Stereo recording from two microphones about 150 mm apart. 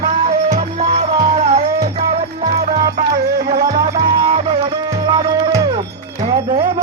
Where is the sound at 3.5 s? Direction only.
70° right (ahead or behind).